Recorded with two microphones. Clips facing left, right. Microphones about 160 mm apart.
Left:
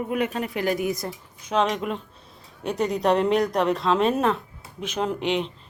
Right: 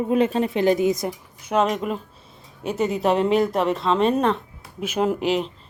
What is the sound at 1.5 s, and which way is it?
Speech, 5° right (ahead or behind).